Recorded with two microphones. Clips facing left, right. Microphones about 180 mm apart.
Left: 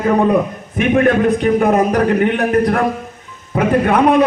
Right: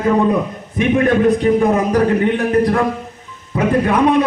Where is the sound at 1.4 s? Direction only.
60° left (ahead or behind).